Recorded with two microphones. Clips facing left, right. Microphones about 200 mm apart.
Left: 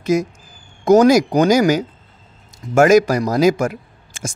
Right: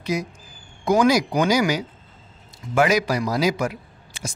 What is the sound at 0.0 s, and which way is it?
A man's voice, 45° left (ahead or behind).